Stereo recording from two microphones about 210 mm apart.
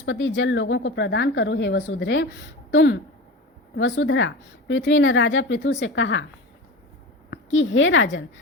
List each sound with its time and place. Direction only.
0.0 s speech: 65° left (ahead or behind)
7.3 s a woman's voice: 65° left (ahead or behind)